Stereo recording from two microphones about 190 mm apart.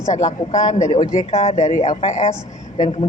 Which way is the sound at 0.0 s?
35° left (ahead or behind).